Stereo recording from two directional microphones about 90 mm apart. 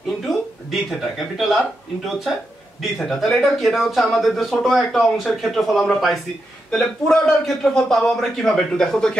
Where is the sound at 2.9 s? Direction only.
5° left (ahead or behind).